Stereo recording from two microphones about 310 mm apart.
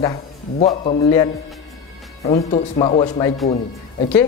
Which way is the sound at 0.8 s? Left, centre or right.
Centre.